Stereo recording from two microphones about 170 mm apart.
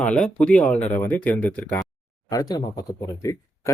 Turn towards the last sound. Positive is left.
turn(degrees=20)  # may be behind; listen again after turning